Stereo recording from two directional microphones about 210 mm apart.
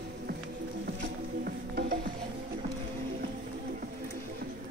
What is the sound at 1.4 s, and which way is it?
Music, 45° right (ahead or behind).